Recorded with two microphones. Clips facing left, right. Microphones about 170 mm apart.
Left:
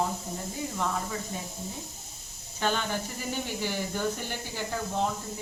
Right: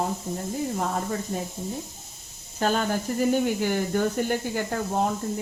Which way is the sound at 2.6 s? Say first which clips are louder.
Right 5 dB; 40° right (ahead or behind).